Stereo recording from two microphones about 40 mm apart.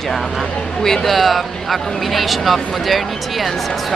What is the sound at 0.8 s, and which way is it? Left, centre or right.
Speech, centre.